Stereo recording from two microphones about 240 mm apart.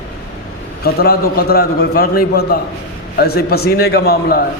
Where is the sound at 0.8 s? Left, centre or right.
Left.